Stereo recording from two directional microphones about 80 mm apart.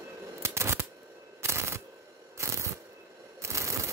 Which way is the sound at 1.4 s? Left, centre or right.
Right.